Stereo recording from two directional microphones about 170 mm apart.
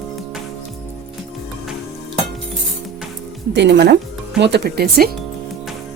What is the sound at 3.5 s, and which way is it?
A woman's voice, 90° right.